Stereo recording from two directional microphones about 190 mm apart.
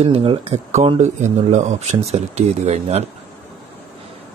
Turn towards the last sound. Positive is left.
turn(degrees=-35)  # may be behind; listen again after turning